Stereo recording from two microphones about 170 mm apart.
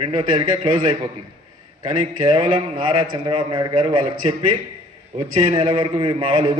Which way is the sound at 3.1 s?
30° right (ahead or behind).